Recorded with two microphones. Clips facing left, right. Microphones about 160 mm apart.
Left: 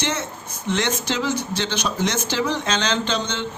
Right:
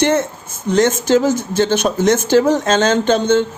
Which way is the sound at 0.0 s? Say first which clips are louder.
Right 11 dB; 50° right (ahead or behind).